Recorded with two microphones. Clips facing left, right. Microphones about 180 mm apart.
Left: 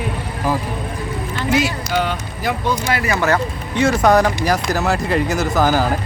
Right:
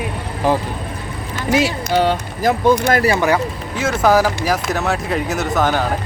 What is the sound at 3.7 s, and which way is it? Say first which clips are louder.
Speech: left 1 dB; 5° right (ahead or behind).